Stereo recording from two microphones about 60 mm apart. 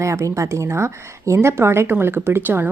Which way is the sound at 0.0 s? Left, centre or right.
Right.